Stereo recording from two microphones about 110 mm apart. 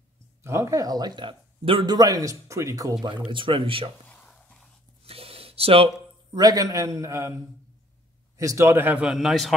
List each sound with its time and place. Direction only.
0.4 s speech: 25° right (ahead or behind); by 1.9 s 55° right (ahead or behind)
1.9 s speech: 35° right (ahead or behind)
3.3 s speech: 50° right (ahead or behind)
4.1 s whispering: 10° left (ahead or behind)
5.0 s a sound: 60° right (ahead or behind)
6.3 s speech: 35° right (ahead or behind)
8.4 s speech: 25° right (ahead or behind)
9.0 s a man's voice: 5° right (ahead or behind)